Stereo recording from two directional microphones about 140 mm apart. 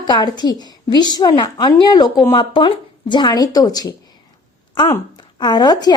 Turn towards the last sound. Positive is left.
turn(degrees=30)  # may be behind; listen again after turning